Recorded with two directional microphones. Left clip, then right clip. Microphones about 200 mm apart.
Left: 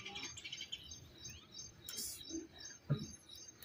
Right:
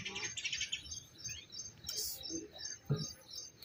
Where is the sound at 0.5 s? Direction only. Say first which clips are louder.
Right 7 dB; 65° left (ahead or behind).